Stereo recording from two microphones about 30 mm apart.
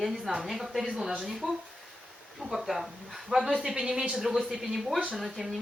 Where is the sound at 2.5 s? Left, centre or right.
Centre.